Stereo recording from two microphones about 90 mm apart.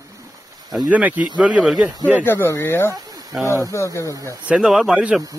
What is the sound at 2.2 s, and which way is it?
Speech, 25° left (ahead or behind).